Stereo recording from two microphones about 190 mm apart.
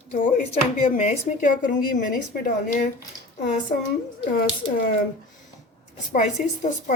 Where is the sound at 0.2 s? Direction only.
45° left (ahead or behind).